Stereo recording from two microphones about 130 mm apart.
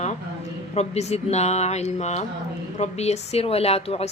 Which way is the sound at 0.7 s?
55° left (ahead or behind).